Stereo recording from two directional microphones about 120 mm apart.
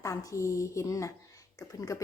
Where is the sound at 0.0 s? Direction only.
25° left (ahead or behind).